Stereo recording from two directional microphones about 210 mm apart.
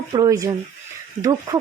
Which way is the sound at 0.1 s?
20° right (ahead or behind).